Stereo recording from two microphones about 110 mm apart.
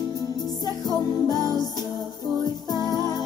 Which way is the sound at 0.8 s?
35° left (ahead or behind).